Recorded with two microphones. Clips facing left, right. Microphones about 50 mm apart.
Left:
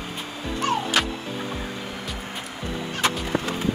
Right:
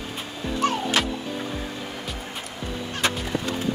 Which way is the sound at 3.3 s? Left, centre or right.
Left.